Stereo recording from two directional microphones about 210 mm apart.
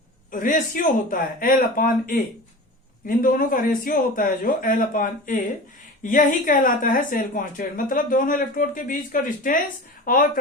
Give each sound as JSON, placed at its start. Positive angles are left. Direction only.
{"t": 0.3, "sound": "speech", "side_deg": 40}